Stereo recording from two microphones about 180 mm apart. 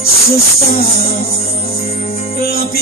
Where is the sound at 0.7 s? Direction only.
55° left (ahead or behind).